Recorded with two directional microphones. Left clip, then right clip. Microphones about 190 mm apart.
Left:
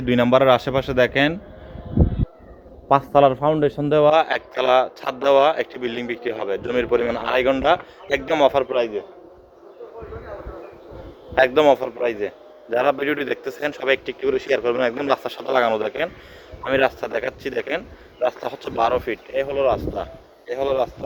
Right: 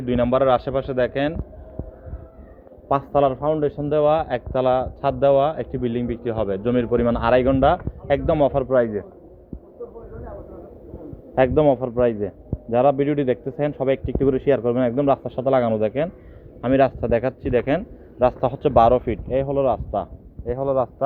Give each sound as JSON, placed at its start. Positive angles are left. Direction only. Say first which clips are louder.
{"t": 0.0, "sound": "a man's voice", "louder": "left 3 dB", "side_deg": 30}
{"t": 2.9, "sound": "speech", "louder": "left 4 dB", "side_deg": 35}
{"t": 11.3, "sound": "a man's voice", "louder": "left 2 dB", "side_deg": 25}